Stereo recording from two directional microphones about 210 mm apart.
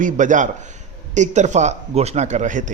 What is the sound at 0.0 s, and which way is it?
A man's voice, 35° right (ahead or behind).